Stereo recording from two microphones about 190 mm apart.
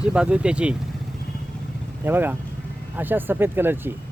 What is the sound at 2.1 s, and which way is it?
Speech, 10° right (ahead or behind).